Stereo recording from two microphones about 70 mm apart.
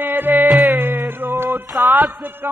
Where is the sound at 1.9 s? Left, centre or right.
Right.